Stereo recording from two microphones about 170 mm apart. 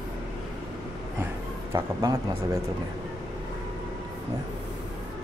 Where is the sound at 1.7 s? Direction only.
20° right (ahead or behind).